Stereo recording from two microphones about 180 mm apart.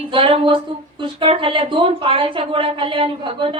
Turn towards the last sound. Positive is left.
turn(degrees=-30)  # may be behind; listen again after turning